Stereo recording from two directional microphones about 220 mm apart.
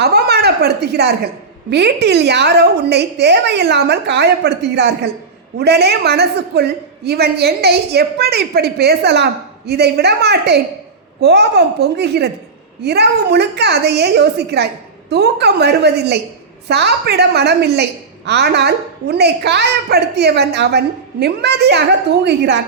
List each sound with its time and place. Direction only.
0.0 s a woman's voice: 45° right (ahead or behind)